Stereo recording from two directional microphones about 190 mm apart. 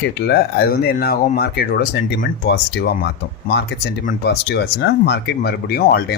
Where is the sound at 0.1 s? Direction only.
55° left (ahead or behind).